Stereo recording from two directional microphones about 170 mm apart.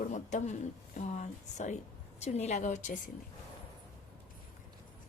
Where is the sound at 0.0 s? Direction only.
45° left (ahead or behind).